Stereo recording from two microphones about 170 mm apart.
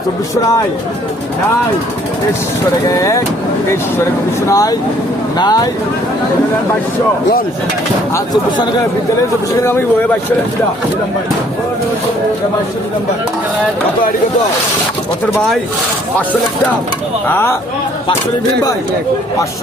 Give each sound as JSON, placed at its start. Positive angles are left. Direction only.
{"t": 2.8, "sound": "speech", "side_deg": 20}
{"t": 4.4, "sound": "speech", "side_deg": 20}
{"t": 8.1, "sound": "speech", "side_deg": 25}
{"t": 17.2, "sound": "speech", "side_deg": 10}